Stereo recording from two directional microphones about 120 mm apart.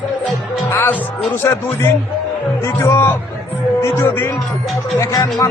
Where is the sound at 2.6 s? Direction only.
20° left (ahead or behind).